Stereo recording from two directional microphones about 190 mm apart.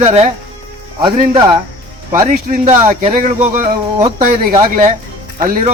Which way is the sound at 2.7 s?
35° right (ahead or behind).